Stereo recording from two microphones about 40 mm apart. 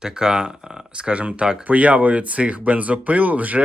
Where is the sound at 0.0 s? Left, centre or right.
Centre.